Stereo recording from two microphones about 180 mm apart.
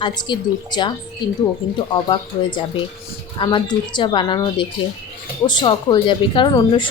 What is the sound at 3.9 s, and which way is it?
Speech, 25° left (ahead or behind).